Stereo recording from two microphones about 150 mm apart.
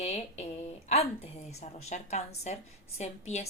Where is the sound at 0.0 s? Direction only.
45° left (ahead or behind).